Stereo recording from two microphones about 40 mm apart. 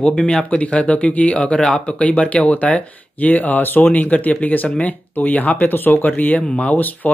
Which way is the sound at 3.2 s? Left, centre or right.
Left.